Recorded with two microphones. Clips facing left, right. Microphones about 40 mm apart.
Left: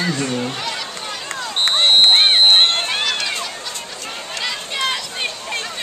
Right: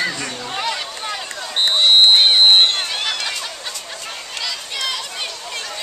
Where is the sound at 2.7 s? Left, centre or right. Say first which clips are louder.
Left 3 dB; left.